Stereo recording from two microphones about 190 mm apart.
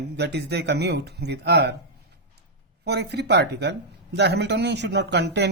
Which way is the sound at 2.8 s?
60° right (ahead or behind).